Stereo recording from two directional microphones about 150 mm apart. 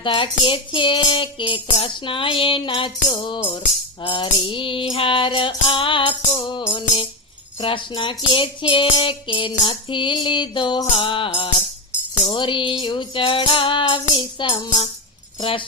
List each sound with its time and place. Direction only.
0.0 s music: 35° left (ahead or behind)
12.3 s music: 35° left (ahead or behind)